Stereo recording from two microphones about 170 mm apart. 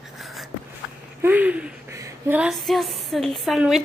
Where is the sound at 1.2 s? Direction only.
10° right (ahead or behind).